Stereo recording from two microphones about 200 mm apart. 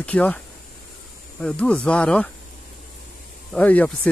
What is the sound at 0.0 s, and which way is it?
Speech, 5° left (ahead or behind).